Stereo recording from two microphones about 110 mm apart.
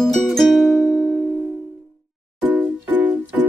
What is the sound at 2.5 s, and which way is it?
Music, 15° right (ahead or behind).